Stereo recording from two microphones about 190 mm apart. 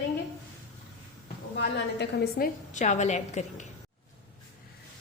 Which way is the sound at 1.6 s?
55° left (ahead or behind).